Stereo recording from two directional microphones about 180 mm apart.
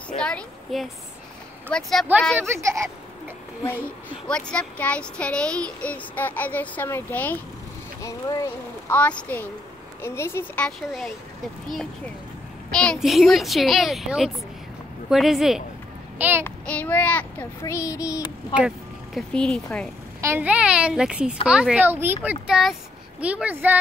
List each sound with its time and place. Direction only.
0.2 s a sound: 5° left (ahead or behind)
1.7 s a child's voice: centre (ahead or behind)
2.4 s speech: 15° right (ahead or behind)
4.3 s a child's voice: 5° left (ahead or behind); by 16.4 s 10° right (ahead or behind)
16.4 s speech: 10° left (ahead or behind)
19.1 s a child's voice: 5° left (ahead or behind)
20.2 s speech: 15° right (ahead or behind)